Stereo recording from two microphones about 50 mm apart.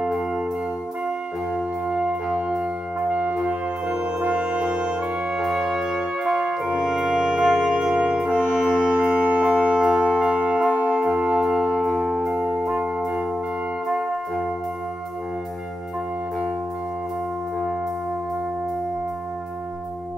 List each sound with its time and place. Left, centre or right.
1.5 s music: centre
3.1 s brass instrument: right
5.4 s music: centre
8.3 s brass instrument: left
9.0 s music: right
11.9 s music: centre
12.4 s music: centre
12.7 s music: centre